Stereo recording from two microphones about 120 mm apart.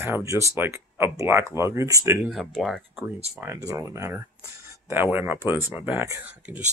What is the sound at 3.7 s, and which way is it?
Speech, 25° right (ahead or behind).